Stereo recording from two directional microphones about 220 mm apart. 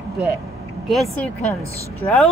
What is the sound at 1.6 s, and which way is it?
Speech, 30° left (ahead or behind).